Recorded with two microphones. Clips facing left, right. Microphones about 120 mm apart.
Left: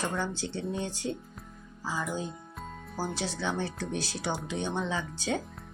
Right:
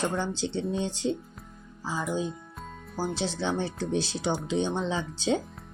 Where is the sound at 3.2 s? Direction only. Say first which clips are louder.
Right 3 dB; 25° right (ahead or behind).